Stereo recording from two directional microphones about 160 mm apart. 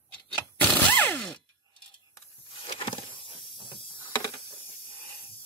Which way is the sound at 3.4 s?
30° left (ahead or behind).